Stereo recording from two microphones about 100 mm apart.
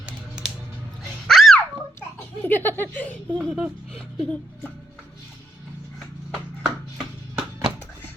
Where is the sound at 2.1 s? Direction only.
20° left (ahead or behind).